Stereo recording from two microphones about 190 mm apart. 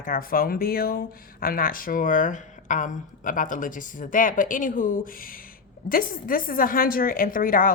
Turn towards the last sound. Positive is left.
turn(degrees=50)  # may be behind; listen again after turning